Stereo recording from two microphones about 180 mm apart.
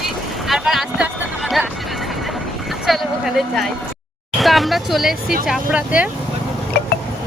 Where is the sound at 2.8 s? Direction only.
Centre (ahead or behind).